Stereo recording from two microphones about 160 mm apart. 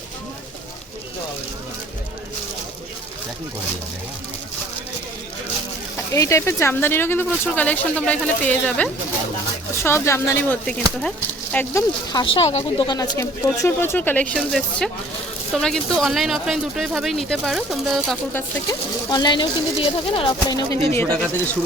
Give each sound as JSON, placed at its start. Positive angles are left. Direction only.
{"t": 6.1, "sound": "speech", "side_deg": 20}
{"t": 12.1, "sound": "speech", "side_deg": 35}
{"t": 12.9, "sound": "speech", "side_deg": 20}
{"t": 14.3, "sound": "speech", "side_deg": 0}
{"t": 18.7, "sound": "speech", "side_deg": 25}